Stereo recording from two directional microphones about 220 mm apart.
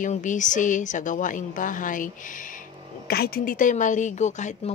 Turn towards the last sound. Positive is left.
turn(degrees=35)  # may be behind; listen again after turning